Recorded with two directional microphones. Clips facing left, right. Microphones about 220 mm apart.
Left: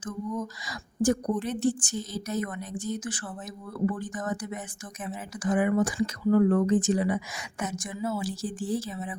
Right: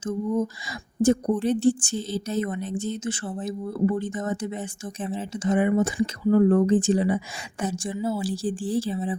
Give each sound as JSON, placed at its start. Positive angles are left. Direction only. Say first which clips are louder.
{"t": 0.0, "sound": "a woman's voice", "louder": "right 7 dB", "side_deg": -25}